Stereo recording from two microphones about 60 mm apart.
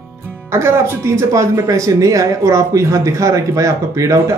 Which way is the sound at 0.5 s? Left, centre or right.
Right.